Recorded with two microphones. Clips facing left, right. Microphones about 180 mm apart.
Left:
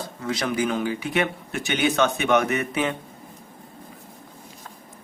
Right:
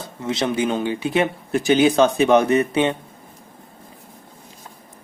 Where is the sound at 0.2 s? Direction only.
25° right (ahead or behind).